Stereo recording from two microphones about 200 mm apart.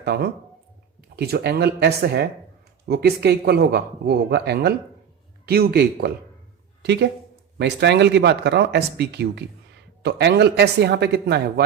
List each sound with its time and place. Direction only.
0.0 s speech: 55° right (ahead or behind)